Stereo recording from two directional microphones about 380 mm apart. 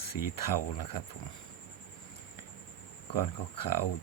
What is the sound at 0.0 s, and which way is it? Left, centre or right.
Speech, left.